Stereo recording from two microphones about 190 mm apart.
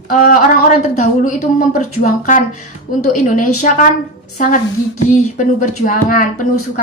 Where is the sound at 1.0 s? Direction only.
45° left (ahead or behind).